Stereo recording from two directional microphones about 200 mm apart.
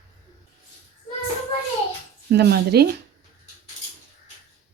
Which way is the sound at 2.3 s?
55° right (ahead or behind).